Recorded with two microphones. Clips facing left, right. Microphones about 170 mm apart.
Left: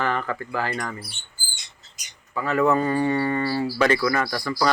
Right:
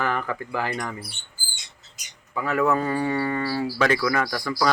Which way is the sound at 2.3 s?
10° right (ahead or behind).